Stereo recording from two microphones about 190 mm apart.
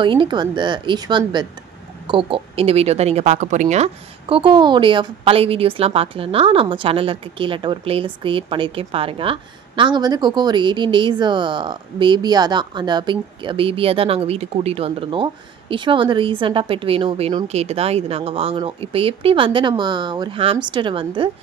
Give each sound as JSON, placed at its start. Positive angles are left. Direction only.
{"t": 0.0, "sound": "speech", "side_deg": -25}